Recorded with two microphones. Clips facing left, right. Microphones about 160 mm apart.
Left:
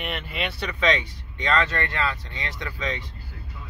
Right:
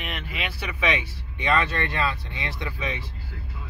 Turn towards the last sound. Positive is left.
turn(degrees=-10)  # may be behind; listen again after turning